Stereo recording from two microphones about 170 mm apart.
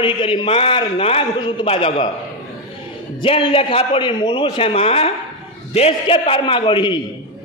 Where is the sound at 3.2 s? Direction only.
30° left (ahead or behind).